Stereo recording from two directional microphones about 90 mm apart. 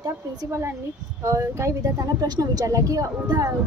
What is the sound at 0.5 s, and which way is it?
A woman's voice, 30° right (ahead or behind).